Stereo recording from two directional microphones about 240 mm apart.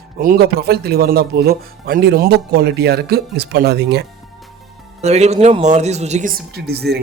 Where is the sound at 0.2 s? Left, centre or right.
Right.